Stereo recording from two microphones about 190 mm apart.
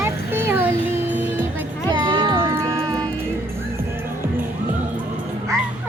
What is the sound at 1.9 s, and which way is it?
Music, 25° right (ahead or behind).